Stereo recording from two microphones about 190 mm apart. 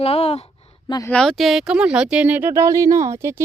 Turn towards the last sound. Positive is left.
turn(degrees=-15)  # may be behind; listen again after turning